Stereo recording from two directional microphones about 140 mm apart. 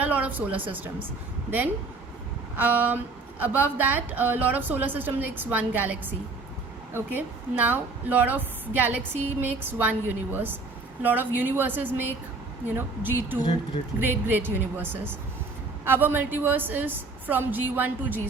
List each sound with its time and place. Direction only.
0.0 s a sound: 10° right (ahead or behind)
0.5 s speech: 40° right (ahead or behind)
1.5 s speech: 10° right (ahead or behind)